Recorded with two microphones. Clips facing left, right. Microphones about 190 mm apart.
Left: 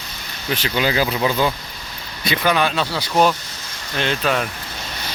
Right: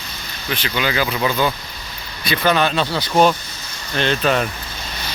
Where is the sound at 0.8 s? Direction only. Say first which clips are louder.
Left 1 dB; 35° left (ahead or behind).